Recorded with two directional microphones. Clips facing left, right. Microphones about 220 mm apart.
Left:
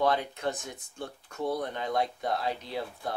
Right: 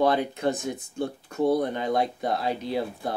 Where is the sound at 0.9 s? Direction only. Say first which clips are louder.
Right 8 dB; 30° right (ahead or behind).